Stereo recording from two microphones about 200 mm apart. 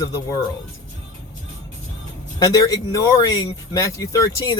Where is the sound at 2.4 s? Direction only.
20° left (ahead or behind).